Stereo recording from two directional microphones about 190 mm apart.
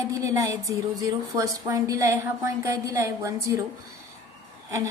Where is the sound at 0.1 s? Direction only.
15° right (ahead or behind).